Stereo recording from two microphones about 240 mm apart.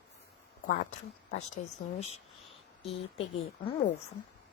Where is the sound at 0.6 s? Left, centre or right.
Left.